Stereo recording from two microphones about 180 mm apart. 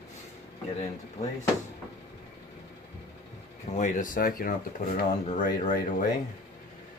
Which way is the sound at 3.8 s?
45° left (ahead or behind).